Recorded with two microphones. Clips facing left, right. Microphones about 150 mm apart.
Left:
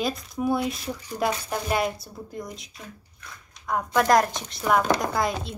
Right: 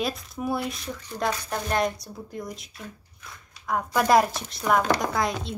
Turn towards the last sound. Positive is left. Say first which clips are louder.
# left 1 dB
turn(degrees=0)  # may be behind; listen again after turning